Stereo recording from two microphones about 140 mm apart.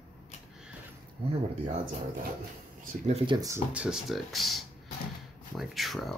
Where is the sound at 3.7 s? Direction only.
5° right (ahead or behind).